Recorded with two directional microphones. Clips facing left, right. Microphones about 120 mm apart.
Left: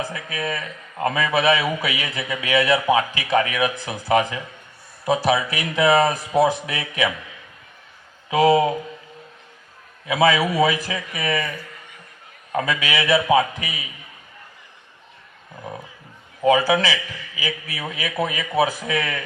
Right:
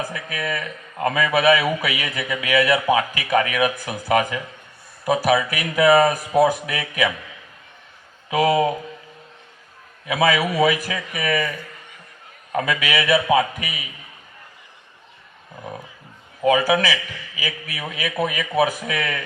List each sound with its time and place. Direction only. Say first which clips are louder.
0.0 s a man's voice: even; 30° left (ahead or behind)
8.3 s a man's voice: left 2 dB; 30° left (ahead or behind)
10.1 s a man's voice: left 1 dB; 30° left (ahead or behind)
12.5 s a man's voice: right 1 dB; 30° left (ahead or behind)
16.4 s a man's voice: even; 30° left (ahead or behind)